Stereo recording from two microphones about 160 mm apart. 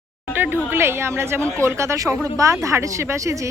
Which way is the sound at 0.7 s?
15° right (ahead or behind).